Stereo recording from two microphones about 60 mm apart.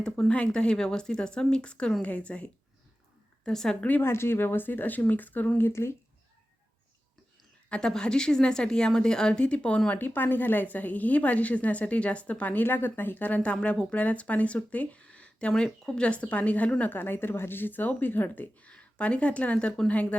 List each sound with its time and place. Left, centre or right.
0.3 s a woman's voice: left
3.4 s speech: centre
3.8 s a woman's voice: left
4.0 s speech: left
5.5 s speech: left
7.7 s speech: centre
10.0 s a woman's voice: left
16.9 s speech: left
18.7 s speech: left
19.9 s a woman's voice: left